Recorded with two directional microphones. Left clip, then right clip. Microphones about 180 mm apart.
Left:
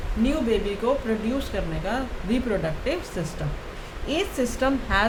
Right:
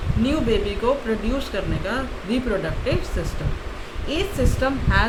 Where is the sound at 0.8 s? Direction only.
15° left (ahead or behind).